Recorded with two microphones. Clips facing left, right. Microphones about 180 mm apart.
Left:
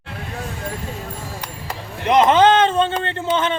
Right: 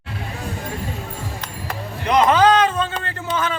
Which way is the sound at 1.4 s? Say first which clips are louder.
Right 1 dB; 20° left (ahead or behind).